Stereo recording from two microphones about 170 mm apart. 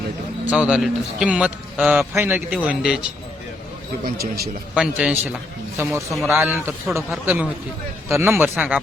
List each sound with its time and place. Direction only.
0.5 s a man's voice: 5° right (ahead or behind)
4.0 s a man's voice: 65° right (ahead or behind)
4.7 s a man's voice: 5° right (ahead or behind)